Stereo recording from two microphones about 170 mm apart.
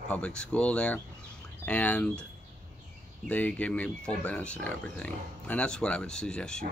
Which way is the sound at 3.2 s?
10° left (ahead or behind).